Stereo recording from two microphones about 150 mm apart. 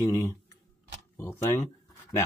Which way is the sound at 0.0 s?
20° left (ahead or behind).